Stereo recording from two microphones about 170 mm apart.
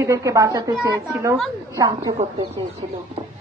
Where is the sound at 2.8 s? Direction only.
35° right (ahead or behind).